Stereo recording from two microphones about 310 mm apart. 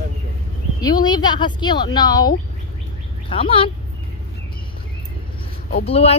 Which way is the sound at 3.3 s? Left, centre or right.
Centre.